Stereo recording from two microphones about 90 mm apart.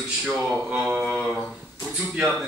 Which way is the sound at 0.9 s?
20° right (ahead or behind).